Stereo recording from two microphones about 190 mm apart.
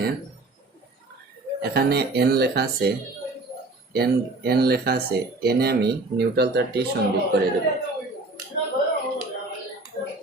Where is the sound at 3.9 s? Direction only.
55° right (ahead or behind).